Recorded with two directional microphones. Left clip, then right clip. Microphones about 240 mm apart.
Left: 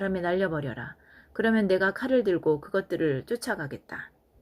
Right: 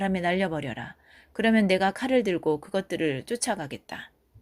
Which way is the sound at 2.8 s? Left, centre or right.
Right.